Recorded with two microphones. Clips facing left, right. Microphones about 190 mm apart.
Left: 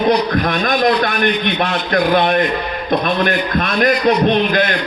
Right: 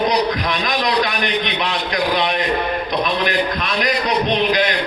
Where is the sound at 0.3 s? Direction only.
55° left (ahead or behind).